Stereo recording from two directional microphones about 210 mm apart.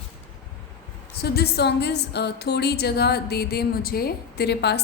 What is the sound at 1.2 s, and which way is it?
A woman's voice, 50° left (ahead or behind).